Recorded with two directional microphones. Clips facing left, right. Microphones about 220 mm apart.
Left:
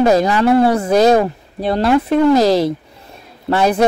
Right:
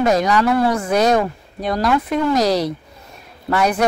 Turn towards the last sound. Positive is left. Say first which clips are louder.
# left 3 dB
turn(degrees=30)  # may be behind; listen again after turning